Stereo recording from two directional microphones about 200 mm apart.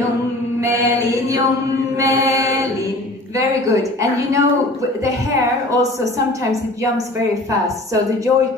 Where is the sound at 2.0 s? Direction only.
15° right (ahead or behind).